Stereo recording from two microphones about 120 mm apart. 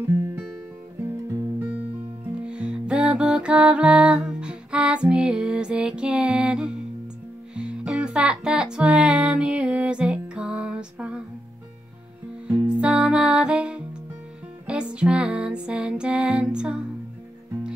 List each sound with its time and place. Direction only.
0.0 s music: 25° right (ahead or behind)
1.0 s guitar: 20° right (ahead or behind)
2.4 s music: 10° right (ahead or behind)
12.4 s music: 10° right (ahead or behind)